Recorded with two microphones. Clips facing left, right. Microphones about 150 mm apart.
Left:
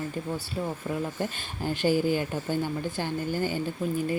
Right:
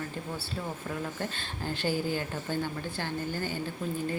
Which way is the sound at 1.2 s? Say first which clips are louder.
Left 4 dB; 15° left (ahead or behind).